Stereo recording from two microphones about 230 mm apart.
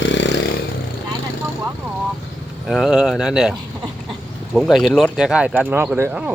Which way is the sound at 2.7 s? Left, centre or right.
Centre.